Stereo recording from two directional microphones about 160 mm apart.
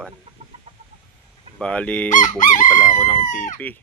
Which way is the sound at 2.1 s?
55° left (ahead or behind).